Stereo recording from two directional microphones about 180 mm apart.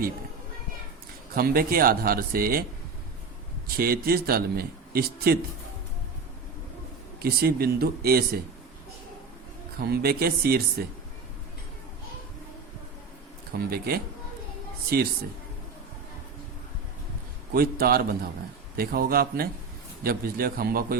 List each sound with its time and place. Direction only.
1.4 s a man's voice: 55° right (ahead or behind)
3.8 s a man's voice: 55° right (ahead or behind)
7.2 s a man's voice: 60° right (ahead or behind)
9.8 s a man's voice: 60° right (ahead or behind)
13.7 s a man's voice: 60° right (ahead or behind)
17.5 s a man's voice: 55° right (ahead or behind)